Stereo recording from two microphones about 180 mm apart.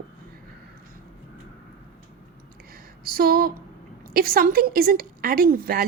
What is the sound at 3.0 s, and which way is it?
A woman's voice, 55° right (ahead or behind).